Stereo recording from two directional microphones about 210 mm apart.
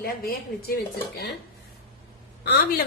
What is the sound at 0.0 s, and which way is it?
Speech, 45° left (ahead or behind).